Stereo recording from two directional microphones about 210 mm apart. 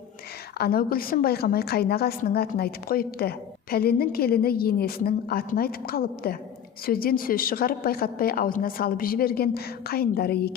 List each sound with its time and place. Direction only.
0.6 s a woman's voice: 45° left (ahead or behind)